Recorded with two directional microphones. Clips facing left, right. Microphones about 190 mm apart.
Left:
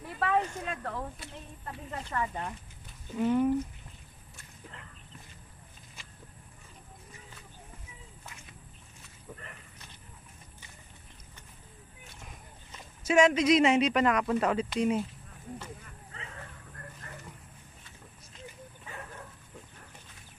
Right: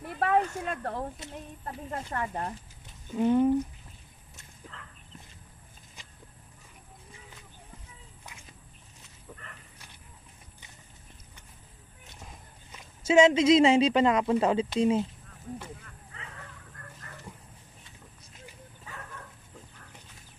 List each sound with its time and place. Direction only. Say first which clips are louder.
0.2 s a sound: right 3 dB; 50° right (ahead or behind)
0.9 s speech: right 3 dB; 20° right (ahead or behind)
1.9 s speech: even; 40° right (ahead or behind)
3.2 s speech: right 3 dB; 20° right (ahead or behind)
4.7 s bow-wow: right 1 dB; 15° left (ahead or behind)
6.0 s a sound: even; 15° right (ahead or behind)
13.0 s speech: right 3 dB; 25° right (ahead or behind)